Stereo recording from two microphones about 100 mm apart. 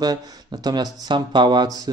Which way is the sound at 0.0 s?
40° right (ahead or behind).